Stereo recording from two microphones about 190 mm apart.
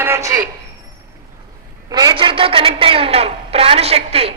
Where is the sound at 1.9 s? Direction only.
20° right (ahead or behind).